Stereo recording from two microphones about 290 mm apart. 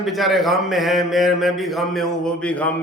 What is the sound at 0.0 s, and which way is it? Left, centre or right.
A man's voice, centre.